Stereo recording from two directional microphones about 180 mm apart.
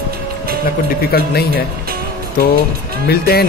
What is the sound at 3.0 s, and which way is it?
Speech, 60° left (ahead or behind).